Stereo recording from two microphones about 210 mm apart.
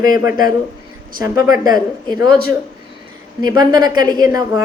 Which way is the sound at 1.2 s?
15° right (ahead or behind).